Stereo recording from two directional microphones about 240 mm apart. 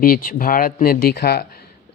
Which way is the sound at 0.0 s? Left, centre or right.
Left.